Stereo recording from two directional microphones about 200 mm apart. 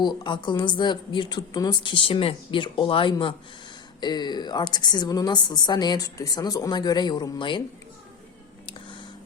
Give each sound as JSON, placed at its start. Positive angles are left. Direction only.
{"t": 0.0, "sound": "a woman's voice", "side_deg": 20}